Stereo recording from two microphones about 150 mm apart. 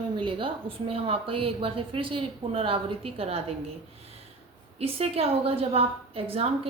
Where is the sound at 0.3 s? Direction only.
35° right (ahead or behind).